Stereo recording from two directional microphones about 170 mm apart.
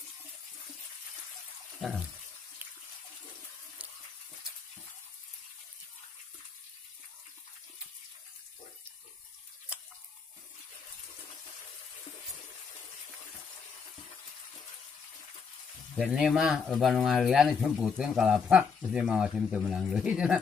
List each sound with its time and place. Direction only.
1.8 s water tap: 5° right (ahead or behind)
16.0 s speech: centre (ahead or behind)